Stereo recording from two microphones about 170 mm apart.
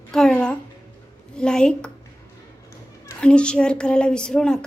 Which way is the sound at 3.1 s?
5° left (ahead or behind).